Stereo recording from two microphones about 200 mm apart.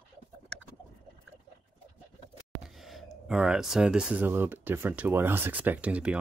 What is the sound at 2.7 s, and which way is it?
Speech, centre (ahead or behind).